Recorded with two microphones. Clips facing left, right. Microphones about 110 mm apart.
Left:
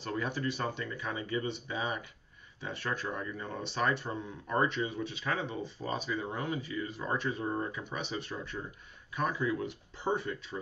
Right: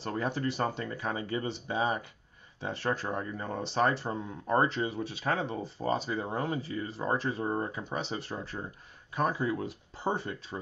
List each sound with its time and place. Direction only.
0.0 s speech: 35° right (ahead or behind)